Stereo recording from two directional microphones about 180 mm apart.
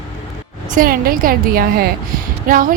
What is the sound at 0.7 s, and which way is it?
A woman's voice, 50° right (ahead or behind).